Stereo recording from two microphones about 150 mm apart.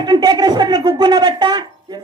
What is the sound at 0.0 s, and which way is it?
A woman's voice, 30° right (ahead or behind).